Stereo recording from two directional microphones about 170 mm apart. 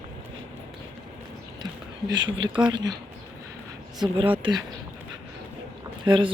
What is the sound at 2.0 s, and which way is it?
Speech, 25° right (ahead or behind).